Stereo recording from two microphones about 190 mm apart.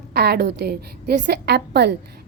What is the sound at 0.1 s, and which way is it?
A woman's voice, 55° right (ahead or behind).